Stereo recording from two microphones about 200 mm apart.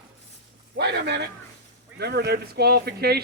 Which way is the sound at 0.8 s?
55° right (ahead or behind).